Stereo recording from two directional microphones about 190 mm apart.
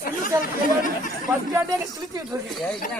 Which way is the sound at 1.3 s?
20° right (ahead or behind).